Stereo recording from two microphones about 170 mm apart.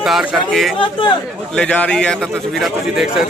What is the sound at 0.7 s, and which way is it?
Speech, 30° left (ahead or behind).